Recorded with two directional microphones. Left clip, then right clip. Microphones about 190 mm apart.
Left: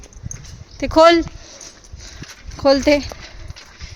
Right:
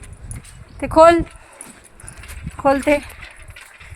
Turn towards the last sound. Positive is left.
turn(degrees=35)  # may be behind; listen again after turning